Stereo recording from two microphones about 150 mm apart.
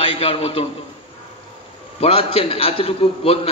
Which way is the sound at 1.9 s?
40° left (ahead or behind).